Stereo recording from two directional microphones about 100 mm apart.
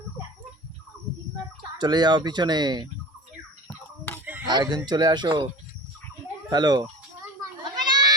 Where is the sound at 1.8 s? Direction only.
45° right (ahead or behind).